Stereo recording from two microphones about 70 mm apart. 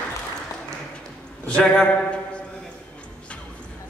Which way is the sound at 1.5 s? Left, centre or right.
Centre.